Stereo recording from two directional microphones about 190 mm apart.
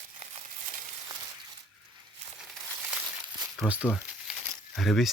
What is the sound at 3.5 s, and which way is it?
Speech, 5° right (ahead or behind).